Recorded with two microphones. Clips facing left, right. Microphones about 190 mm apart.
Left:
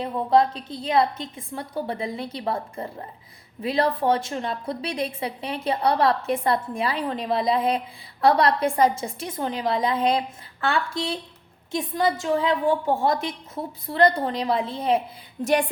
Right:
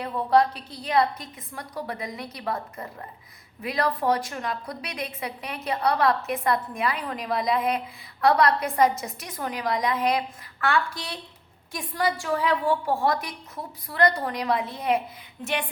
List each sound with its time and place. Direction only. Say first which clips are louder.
0.0 s a woman's voice: left 1 dB; 25° left (ahead or behind)